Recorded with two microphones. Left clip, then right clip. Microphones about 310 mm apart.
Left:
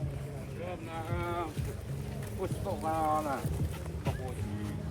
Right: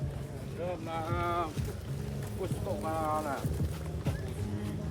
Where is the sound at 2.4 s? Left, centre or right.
Centre.